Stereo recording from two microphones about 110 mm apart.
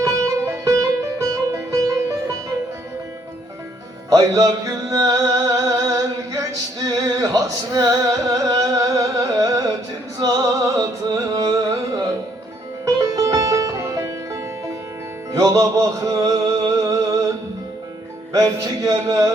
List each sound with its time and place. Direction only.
0.0 s music: 30° right (ahead or behind)
4.1 s music: 35° right (ahead or behind)
15.3 s music: 35° right (ahead or behind)
18.3 s a sound: 35° right (ahead or behind)